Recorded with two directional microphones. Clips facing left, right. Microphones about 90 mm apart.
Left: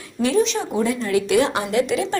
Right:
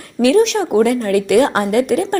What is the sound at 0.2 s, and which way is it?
A woman's voice, 70° right (ahead or behind).